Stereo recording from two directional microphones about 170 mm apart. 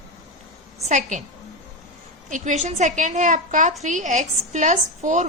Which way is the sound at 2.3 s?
45° right (ahead or behind).